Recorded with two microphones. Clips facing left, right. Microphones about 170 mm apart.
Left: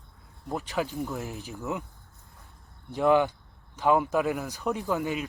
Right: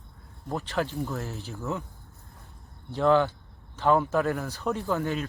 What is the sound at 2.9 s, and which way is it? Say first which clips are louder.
Speech: even; 15° left (ahead or behind).